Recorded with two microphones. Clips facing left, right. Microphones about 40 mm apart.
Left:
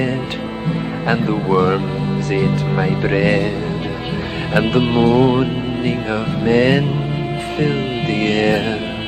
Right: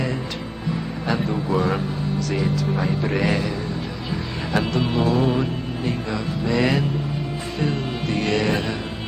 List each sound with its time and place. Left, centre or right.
1.0 s speech: left
4.6 s speech: left
7.5 s music: left